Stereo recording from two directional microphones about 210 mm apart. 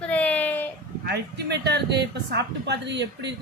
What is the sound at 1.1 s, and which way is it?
A woman's voice, 50° right (ahead or behind).